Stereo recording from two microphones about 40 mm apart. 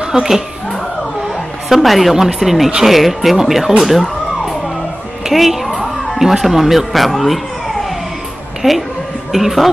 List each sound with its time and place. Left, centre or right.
0.0 s speech: centre
1.8 s speech: centre
5.3 s speech: centre
8.6 s speech: centre